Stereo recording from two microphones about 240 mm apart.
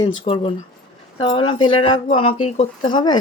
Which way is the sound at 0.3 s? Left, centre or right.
Left.